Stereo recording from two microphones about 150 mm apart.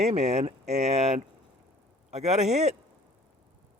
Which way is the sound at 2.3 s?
45° right (ahead or behind).